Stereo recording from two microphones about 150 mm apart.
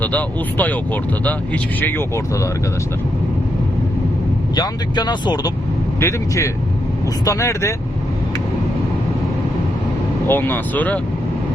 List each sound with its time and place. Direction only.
0.0 s speech: 10° left (ahead or behind)
1.8 s speech: 15° left (ahead or behind)
4.5 s speech: 30° left (ahead or behind)
10.2 s speech: 15° left (ahead or behind)